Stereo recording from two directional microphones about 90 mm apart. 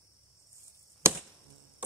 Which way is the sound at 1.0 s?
30° right (ahead or behind).